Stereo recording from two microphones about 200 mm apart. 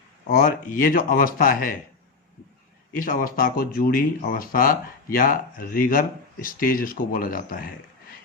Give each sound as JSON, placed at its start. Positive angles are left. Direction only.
{"t": 0.3, "sound": "speech", "side_deg": 40}
{"t": 3.0, "sound": "speech", "side_deg": 45}